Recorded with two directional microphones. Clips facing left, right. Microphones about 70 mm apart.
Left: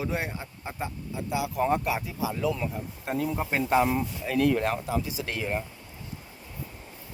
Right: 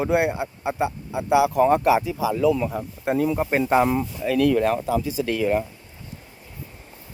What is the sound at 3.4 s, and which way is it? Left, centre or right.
Speech, right.